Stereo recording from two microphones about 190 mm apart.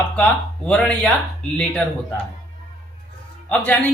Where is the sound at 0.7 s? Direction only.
5° left (ahead or behind).